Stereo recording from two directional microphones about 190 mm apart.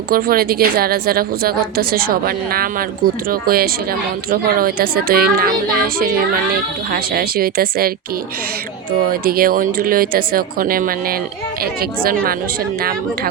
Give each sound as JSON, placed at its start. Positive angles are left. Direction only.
{"t": 0.1, "sound": "a woman's voice", "side_deg": -50}
{"t": 9.0, "sound": "a woman's voice", "side_deg": -50}